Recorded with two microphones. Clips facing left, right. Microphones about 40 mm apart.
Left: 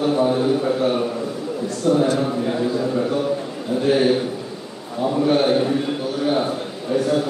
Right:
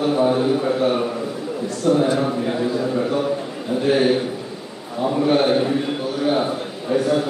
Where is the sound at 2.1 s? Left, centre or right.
Centre.